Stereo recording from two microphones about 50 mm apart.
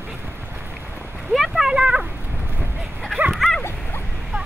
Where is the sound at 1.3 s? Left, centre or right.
Centre.